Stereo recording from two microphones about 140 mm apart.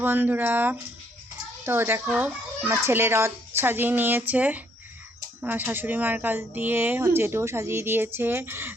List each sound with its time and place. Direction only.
0.0 s speech: 15° right (ahead or behind)